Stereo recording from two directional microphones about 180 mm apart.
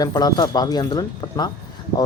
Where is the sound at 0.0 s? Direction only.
20° left (ahead or behind).